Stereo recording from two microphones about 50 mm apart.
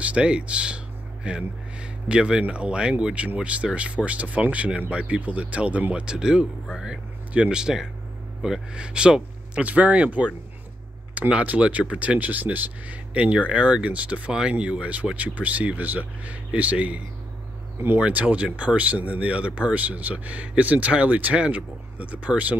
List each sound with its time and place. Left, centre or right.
0.0 s speech: right
6.0 s a man's voice: centre